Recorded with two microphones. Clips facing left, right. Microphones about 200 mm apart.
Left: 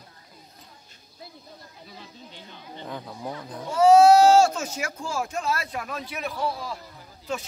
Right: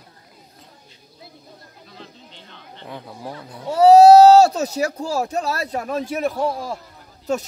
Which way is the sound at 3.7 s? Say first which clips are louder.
Right 6 dB; 35° right (ahead or behind).